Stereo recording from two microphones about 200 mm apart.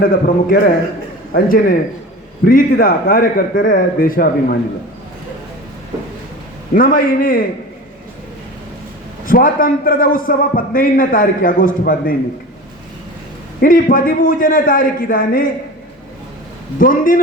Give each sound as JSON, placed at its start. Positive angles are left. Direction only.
{"t": 0.0, "sound": "a man's voice", "side_deg": 45}
{"t": 6.7, "sound": "a man's voice", "side_deg": 45}
{"t": 9.2, "sound": "a man's voice", "side_deg": 45}
{"t": 13.6, "sound": "a man's voice", "side_deg": 45}
{"t": 16.7, "sound": "a man's voice", "side_deg": 45}